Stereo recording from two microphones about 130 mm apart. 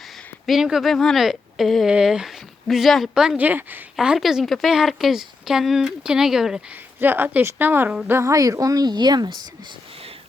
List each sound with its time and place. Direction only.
0.0 s speech: centre (ahead or behind)
3.9 s a woman's voice: 5° right (ahead or behind); by 9.7 s 35° right (ahead or behind)